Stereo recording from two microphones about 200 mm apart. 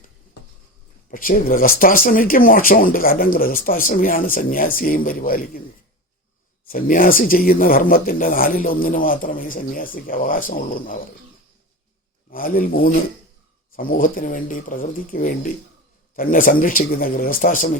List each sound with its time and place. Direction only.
1.1 s speech: 45° left (ahead or behind)
6.7 s speech: 45° left (ahead or behind)
12.3 s speech: 45° left (ahead or behind)